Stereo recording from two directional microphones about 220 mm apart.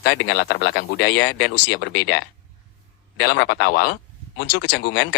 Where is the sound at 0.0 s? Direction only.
50° left (ahead or behind).